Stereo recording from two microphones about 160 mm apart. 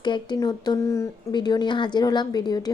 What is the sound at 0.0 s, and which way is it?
Speech, 30° left (ahead or behind).